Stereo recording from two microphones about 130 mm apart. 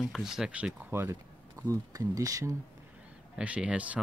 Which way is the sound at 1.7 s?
25° right (ahead or behind).